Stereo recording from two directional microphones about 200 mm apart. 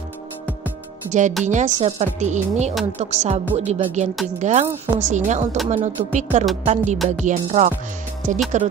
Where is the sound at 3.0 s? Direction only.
35° right (ahead or behind).